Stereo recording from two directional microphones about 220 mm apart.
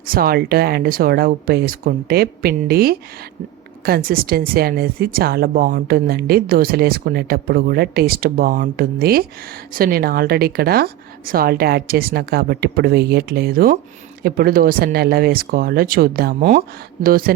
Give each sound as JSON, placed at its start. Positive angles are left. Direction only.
{"t": 0.1, "sound": "speech", "side_deg": -45}